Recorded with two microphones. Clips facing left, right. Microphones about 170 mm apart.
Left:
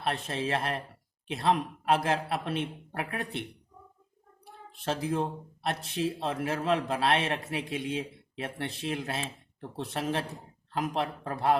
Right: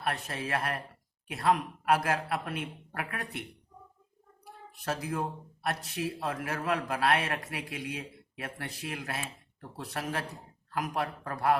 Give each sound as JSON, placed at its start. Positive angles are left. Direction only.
{"t": 0.0, "sound": "speech", "side_deg": 25}
{"t": 4.4, "sound": "speech", "side_deg": 25}